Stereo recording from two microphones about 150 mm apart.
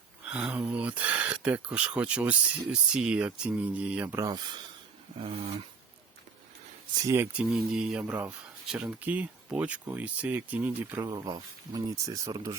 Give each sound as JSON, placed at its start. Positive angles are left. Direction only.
{"t": 0.3, "sound": "speech", "side_deg": -10}
{"t": 4.2, "sound": "speech", "side_deg": -25}
{"t": 5.2, "sound": "speech", "side_deg": -40}
{"t": 7.0, "sound": "speech", "side_deg": -20}
{"t": 7.3, "sound": "speech", "side_deg": -5}
{"t": 11.0, "sound": "speech", "side_deg": -25}